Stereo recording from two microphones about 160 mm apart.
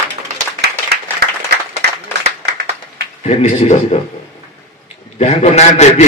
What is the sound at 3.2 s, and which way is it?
Speech, 45° left (ahead or behind).